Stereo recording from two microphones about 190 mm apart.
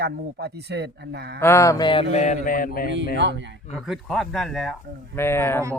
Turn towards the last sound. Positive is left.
turn(degrees=10)  # may be behind; listen again after turning